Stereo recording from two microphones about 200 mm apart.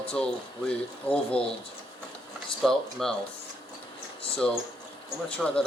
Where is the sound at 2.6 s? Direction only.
Centre (ahead or behind).